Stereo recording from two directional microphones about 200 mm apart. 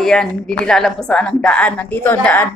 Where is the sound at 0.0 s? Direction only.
5° left (ahead or behind).